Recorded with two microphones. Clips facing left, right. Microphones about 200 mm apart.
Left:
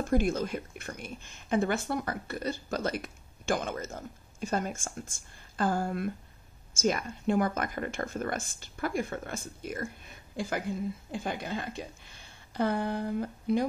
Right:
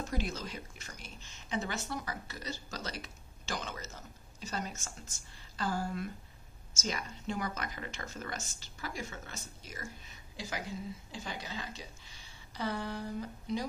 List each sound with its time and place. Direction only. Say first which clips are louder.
0.0 s speech: left 10 dB; 50° left (ahead or behind)